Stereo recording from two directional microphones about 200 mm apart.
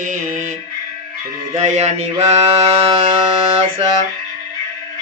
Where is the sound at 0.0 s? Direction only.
40° right (ahead or behind).